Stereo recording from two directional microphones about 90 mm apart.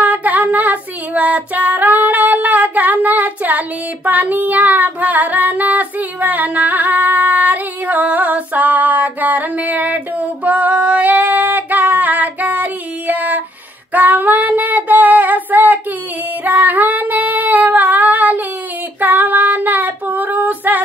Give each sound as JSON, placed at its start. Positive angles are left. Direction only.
{"t": 0.0, "sound": "child singing", "side_deg": -15}
{"t": 16.4, "sound": "female singing", "side_deg": -20}